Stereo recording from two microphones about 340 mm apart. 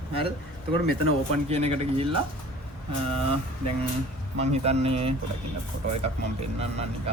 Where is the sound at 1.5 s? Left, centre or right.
Centre.